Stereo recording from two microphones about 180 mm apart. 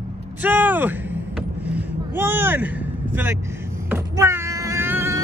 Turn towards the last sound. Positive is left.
turn(degrees=-15)  # may be behind; listen again after turning